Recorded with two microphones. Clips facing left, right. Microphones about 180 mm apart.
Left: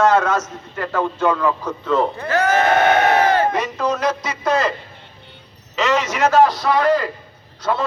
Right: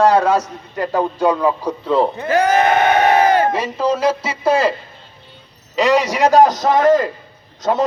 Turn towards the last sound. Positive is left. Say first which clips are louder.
# right 4 dB
turn(degrees=-40)  # may be behind; listen again after turning